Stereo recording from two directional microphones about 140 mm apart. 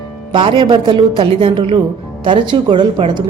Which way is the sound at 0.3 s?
35° right (ahead or behind).